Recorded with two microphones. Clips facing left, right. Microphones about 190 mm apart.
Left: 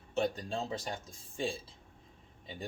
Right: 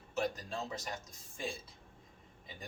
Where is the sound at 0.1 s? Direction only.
30° left (ahead or behind).